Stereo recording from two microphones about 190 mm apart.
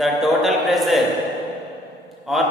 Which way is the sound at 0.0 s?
Centre (ahead or behind).